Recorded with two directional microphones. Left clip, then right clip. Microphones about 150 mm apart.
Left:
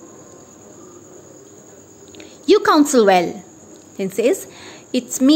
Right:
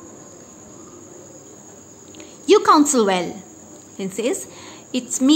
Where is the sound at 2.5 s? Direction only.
30° left (ahead or behind).